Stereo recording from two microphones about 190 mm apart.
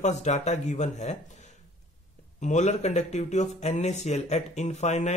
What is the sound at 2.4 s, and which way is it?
Speech, 40° left (ahead or behind).